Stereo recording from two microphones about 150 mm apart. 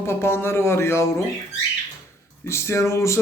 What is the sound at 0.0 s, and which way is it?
A man's voice, 15° left (ahead or behind).